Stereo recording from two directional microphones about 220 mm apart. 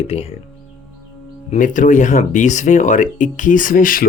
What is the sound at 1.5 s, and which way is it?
Speech, 35° left (ahead or behind).